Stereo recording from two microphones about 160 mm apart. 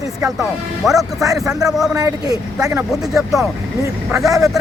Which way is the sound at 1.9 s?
20° right (ahead or behind).